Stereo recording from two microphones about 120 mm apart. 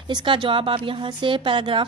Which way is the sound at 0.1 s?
45° right (ahead or behind).